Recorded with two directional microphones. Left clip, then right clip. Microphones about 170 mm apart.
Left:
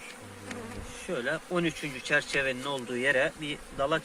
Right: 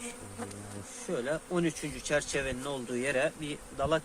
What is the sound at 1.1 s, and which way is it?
Speech, 15° right (ahead or behind).